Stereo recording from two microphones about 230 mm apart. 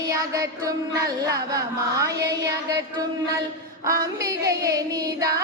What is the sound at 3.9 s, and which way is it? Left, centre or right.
Female singing, centre.